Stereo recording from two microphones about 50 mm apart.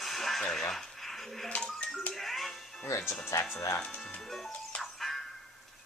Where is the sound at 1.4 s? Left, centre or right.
Left.